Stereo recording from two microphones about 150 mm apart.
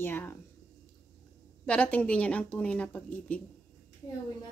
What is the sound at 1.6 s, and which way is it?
A woman's voice, 10° left (ahead or behind).